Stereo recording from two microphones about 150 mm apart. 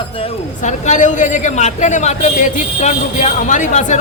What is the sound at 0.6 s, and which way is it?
A man's voice, 55° left (ahead or behind).